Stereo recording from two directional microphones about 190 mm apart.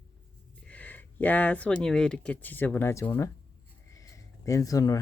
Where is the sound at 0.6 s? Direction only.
10° left (ahead or behind).